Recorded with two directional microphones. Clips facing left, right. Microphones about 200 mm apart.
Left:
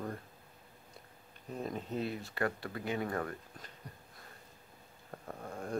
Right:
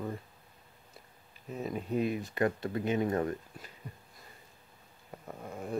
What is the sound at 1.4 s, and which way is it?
Speech, 5° right (ahead or behind).